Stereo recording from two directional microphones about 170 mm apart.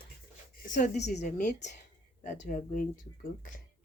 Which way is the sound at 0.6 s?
50° left (ahead or behind).